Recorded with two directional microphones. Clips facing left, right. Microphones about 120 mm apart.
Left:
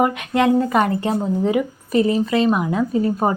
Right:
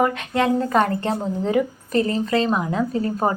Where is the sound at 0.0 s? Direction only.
15° left (ahead or behind).